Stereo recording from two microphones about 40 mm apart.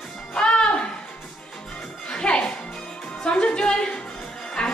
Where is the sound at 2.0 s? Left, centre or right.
Left.